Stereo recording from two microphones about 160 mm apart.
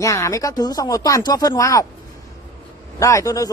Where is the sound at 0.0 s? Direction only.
20° left (ahead or behind).